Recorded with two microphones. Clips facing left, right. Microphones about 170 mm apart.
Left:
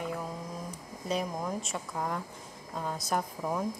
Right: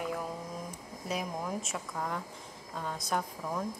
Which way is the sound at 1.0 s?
5° right (ahead or behind).